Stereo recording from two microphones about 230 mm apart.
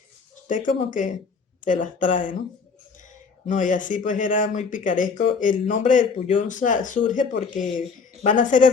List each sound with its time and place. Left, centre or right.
0.4 s speech: left